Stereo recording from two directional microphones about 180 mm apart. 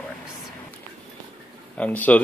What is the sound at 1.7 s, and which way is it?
Speech, 10° left (ahead or behind).